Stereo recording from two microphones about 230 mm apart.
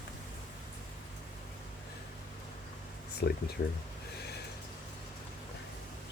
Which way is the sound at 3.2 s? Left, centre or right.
Left.